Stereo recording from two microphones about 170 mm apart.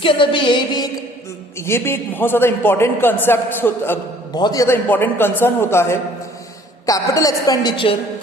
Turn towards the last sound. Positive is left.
turn(degrees=30)  # may be behind; listen again after turning